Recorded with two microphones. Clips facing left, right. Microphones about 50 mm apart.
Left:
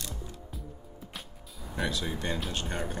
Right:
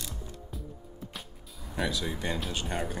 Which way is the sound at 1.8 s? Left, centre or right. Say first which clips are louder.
Right 1 dB; centre.